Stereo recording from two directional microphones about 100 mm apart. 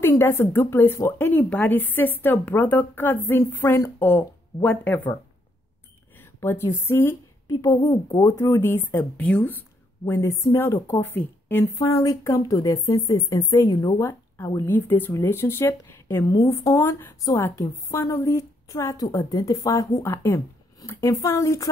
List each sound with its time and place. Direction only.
0.1 s speech: 25° left (ahead or behind)
6.4 s a woman's voice: 25° left (ahead or behind)
7.8 s speech: 45° left (ahead or behind)
8.2 s speech: 30° left (ahead or behind)
10.0 s speech: 30° left (ahead or behind)
15.9 s a sound: 20° left (ahead or behind)
16.3 s speech: 35° left (ahead or behind)